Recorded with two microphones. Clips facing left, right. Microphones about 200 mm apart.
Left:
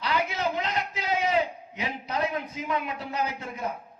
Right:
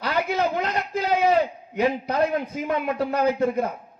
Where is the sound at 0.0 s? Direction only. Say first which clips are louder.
Right 4 dB; 50° right (ahead or behind).